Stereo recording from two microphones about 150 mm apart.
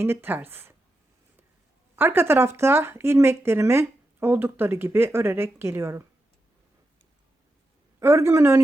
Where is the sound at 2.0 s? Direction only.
15° right (ahead or behind).